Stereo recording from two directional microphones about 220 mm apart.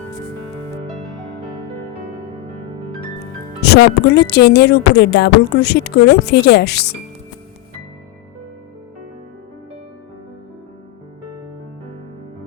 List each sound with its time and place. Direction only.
3.6 s speech: 50° left (ahead or behind)